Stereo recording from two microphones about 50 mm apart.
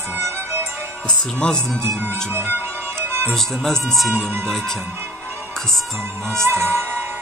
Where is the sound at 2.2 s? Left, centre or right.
Right.